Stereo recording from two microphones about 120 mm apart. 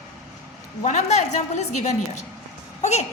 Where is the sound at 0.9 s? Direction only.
75° left (ahead or behind).